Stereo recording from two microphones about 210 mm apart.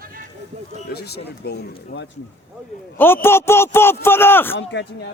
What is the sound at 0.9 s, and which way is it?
Speech, 50° left (ahead or behind).